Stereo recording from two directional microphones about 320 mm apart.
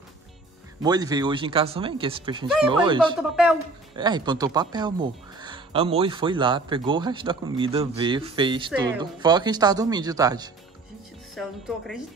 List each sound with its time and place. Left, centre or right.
0.8 s speech: centre
3.2 s speech: centre
3.9 s speech: centre
11.3 s speech: centre